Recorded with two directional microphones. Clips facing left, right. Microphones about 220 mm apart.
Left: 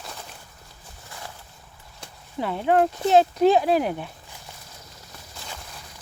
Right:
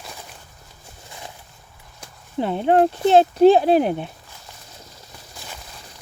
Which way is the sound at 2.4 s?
30° right (ahead or behind).